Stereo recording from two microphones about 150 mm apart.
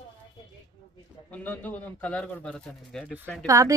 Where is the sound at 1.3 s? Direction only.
10° left (ahead or behind).